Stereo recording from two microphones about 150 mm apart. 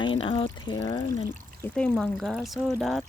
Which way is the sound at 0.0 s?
35° left (ahead or behind).